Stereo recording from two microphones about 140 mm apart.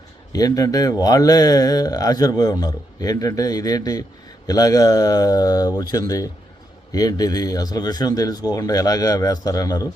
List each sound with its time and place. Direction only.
0.3 s speech: 25° left (ahead or behind)